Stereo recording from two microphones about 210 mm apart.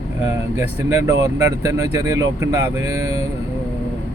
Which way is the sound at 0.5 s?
15° right (ahead or behind).